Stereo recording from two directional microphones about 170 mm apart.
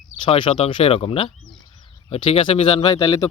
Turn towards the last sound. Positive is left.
turn(degrees=20)  # may be behind; listen again after turning